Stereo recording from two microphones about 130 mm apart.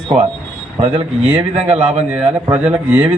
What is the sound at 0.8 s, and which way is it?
A man's voice, 50° right (ahead or behind).